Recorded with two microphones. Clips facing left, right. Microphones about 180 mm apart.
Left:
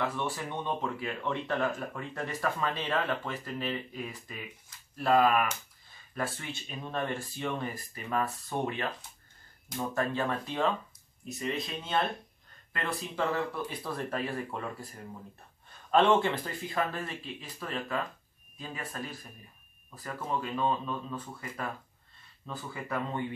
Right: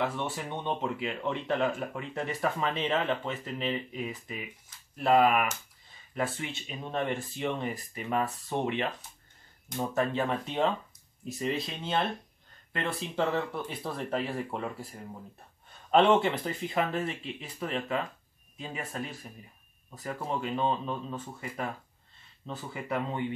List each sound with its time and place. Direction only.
0.0 s speech: 20° right (ahead or behind)
15.9 s speech: 20° right (ahead or behind)
20.2 s speech: 25° right (ahead or behind)